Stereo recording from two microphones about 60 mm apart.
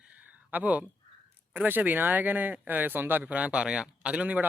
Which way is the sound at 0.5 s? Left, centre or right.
Right.